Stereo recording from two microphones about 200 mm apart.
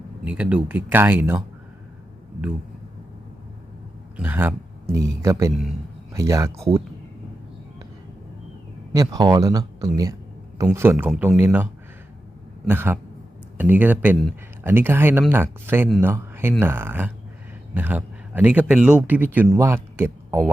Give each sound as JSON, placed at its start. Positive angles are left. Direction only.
{"t": 0.3, "sound": "speech", "side_deg": -5}
{"t": 4.2, "sound": "speech", "side_deg": -10}
{"t": 9.0, "sound": "speech", "side_deg": -20}